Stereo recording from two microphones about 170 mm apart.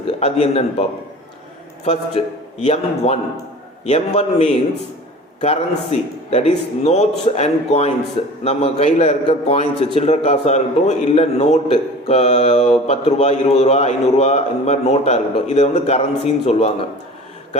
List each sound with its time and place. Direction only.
0.2 s a man's voice: 40° left (ahead or behind)